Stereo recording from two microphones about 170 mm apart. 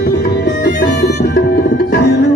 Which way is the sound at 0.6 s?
70° left (ahead or behind).